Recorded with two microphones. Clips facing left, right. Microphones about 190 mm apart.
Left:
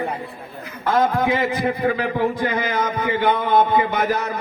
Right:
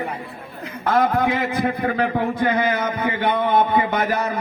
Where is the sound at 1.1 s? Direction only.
55° right (ahead or behind).